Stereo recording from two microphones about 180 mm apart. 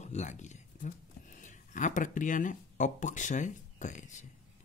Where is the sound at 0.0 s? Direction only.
40° left (ahead or behind).